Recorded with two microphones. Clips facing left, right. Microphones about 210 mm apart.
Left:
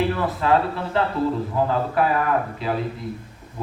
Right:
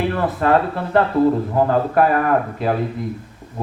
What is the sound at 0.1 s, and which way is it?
A man's voice, 50° right (ahead or behind).